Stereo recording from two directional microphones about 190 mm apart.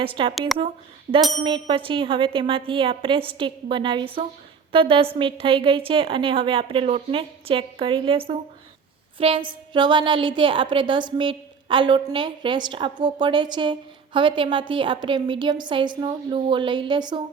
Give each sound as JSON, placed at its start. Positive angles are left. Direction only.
{"t": 0.0, "sound": "a woman's voice", "side_deg": -25}
{"t": 0.3, "sound": "speech", "side_deg": 0}
{"t": 1.5, "sound": "a woman's voice", "side_deg": -25}